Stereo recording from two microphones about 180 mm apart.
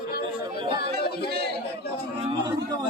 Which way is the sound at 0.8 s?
60° left (ahead or behind).